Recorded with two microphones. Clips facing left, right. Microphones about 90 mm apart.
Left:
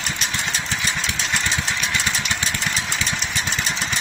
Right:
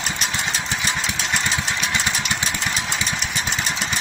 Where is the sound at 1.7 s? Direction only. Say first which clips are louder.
Right 1 dB; 20° right (ahead or behind).